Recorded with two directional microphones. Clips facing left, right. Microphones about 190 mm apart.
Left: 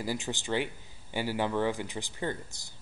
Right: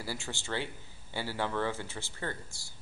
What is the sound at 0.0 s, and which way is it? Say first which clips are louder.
Speech: left 6 dB; 15° left (ahead or behind).